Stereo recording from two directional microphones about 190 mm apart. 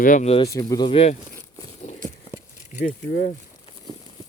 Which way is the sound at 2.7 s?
40° left (ahead or behind).